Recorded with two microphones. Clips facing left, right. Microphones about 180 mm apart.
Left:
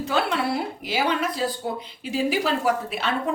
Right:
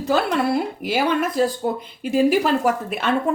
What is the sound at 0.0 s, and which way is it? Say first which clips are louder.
A woman's voice: right 4 dB; 45° right (ahead or behind).